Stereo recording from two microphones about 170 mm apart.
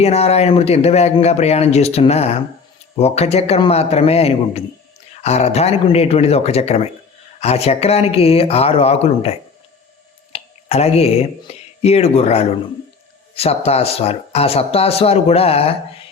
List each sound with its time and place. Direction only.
0.0 s speech: 40° left (ahead or behind)